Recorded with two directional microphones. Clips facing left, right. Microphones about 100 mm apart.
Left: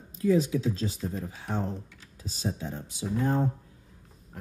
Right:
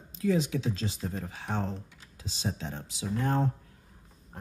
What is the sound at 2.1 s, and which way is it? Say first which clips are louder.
Speech: left 2 dB; 90° right.